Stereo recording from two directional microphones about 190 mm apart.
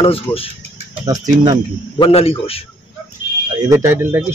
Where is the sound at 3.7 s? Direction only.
15° right (ahead or behind).